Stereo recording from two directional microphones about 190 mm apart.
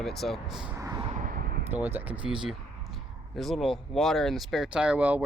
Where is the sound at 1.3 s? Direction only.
50° right (ahead or behind).